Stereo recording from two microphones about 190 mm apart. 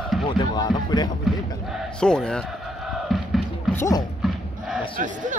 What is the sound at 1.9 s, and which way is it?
Speech, 5° left (ahead or behind).